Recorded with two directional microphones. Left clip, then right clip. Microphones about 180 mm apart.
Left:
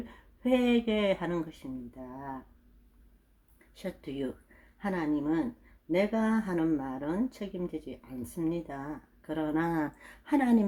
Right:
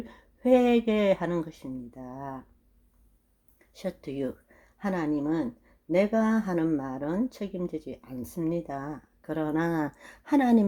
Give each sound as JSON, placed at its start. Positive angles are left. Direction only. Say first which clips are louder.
{"t": 0.1, "sound": "speech", "louder": "right 7 dB", "side_deg": -35}
{"t": 3.8, "sound": "speech", "louder": "right 4 dB", "side_deg": -30}